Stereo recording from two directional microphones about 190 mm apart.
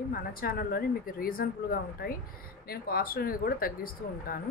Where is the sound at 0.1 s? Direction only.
50° left (ahead or behind).